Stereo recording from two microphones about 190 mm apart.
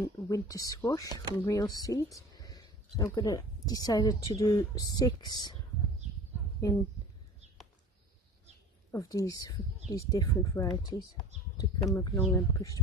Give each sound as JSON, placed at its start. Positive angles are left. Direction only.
{"t": 0.0, "sound": "speech", "side_deg": 15}
{"t": 8.9, "sound": "speech", "side_deg": 20}